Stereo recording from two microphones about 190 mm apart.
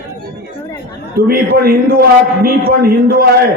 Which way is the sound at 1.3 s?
55° right (ahead or behind).